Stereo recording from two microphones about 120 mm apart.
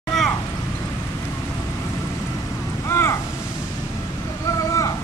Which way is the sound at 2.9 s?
20° left (ahead or behind).